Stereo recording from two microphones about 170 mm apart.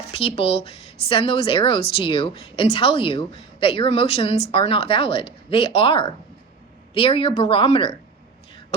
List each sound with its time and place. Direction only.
0.1 s a woman's voice: 35° left (ahead or behind)